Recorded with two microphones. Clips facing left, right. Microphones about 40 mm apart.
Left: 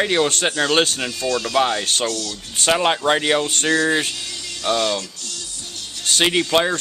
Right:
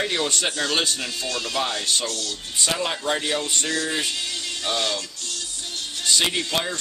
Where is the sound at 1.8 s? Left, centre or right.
Left.